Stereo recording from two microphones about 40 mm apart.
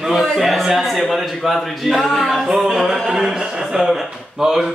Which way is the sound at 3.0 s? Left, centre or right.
Centre.